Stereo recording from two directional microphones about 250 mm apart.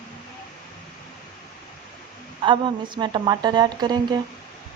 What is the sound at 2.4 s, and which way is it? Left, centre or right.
A woman's voice, centre.